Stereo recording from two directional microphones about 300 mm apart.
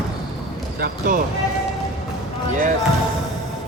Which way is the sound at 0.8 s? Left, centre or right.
Right.